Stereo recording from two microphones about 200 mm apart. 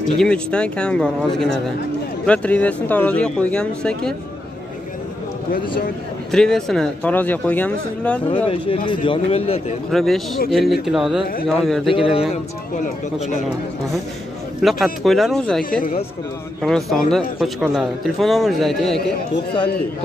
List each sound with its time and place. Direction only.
0.2 s a man's voice: 5° left (ahead or behind)
6.3 s speech: 5° left (ahead or behind)
8.5 s speech: 25° left (ahead or behind)
9.8 s a man's voice: centre (ahead or behind)
11.9 s speech: 25° left (ahead or behind)
14.6 s a man's voice: centre (ahead or behind)
15.8 s speech: 40° left (ahead or behind)
16.6 s a man's voice: centre (ahead or behind)